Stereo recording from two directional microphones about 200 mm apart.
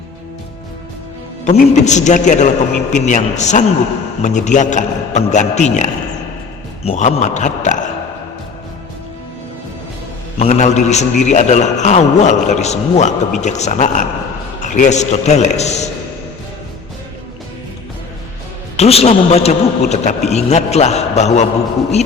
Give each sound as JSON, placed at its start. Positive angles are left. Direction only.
{"t": 1.5, "sound": "a man's voice", "side_deg": 35}
{"t": 10.3, "sound": "a man's voice", "side_deg": 35}
{"t": 18.8, "sound": "a man's voice", "side_deg": 30}